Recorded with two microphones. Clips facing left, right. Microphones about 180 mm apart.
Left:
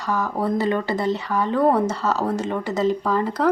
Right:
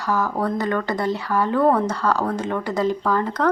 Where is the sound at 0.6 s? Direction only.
25° left (ahead or behind).